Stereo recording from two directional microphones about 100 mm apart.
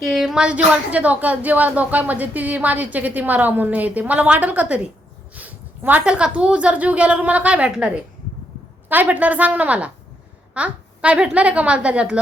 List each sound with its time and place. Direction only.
0.0 s a woman's voice: centre (ahead or behind)